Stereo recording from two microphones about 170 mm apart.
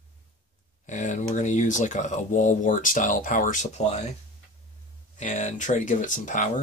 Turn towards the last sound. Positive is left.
turn(degrees=50)  # may be behind; listen again after turning